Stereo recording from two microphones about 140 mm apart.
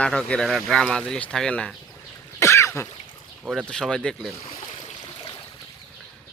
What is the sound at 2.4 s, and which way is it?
Throat clearing, 20° left (ahead or behind).